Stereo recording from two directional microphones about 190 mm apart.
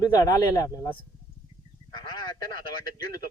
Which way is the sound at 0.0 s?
20° left (ahead or behind).